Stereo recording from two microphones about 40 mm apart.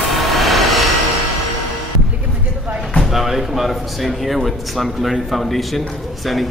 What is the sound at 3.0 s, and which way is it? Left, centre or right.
Speech, centre.